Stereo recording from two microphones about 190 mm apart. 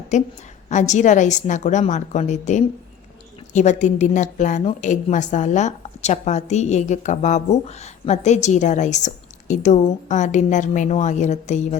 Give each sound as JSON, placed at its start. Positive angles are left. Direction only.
{"t": 0.1, "sound": "a woman's voice", "side_deg": 40}